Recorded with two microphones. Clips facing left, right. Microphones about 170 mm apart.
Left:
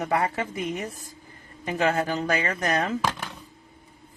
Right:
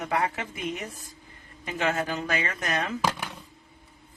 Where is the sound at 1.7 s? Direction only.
35° left (ahead or behind).